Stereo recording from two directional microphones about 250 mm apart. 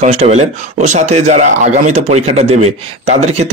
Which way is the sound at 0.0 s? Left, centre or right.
Right.